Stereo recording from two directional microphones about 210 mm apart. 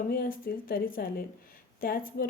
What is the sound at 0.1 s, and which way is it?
A woman's voice, 45° left (ahead or behind).